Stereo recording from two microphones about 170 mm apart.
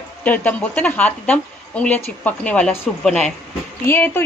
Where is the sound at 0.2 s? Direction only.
10° left (ahead or behind).